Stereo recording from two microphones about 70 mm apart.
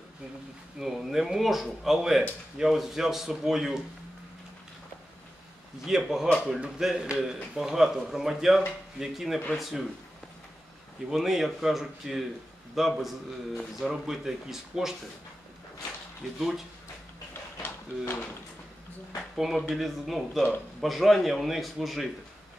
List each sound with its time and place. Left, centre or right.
0.7 s speech: centre
5.9 s speech: centre
11.1 s speech: centre
16.3 s speech: centre
17.3 s a sound: left
19.3 s speech: centre